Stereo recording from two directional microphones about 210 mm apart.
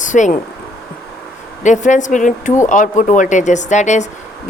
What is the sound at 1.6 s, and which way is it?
Speech, 35° left (ahead or behind).